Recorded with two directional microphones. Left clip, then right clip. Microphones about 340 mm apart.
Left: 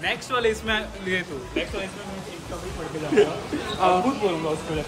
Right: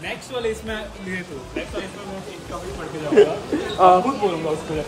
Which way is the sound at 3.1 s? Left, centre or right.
Centre.